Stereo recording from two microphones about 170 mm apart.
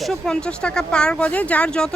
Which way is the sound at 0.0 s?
5° left (ahead or behind).